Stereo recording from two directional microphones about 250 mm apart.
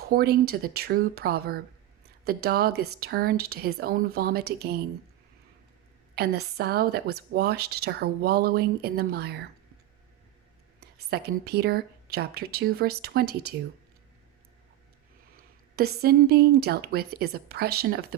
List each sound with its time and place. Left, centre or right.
0.1 s a woman's voice: right
6.1 s a woman's voice: right
10.8 s a woman's voice: right
15.4 s a woman's voice: right